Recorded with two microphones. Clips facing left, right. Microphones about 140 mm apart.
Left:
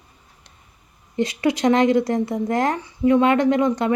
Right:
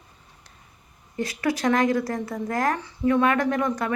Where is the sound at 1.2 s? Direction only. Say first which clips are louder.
Left 5 dB; 20° left (ahead or behind).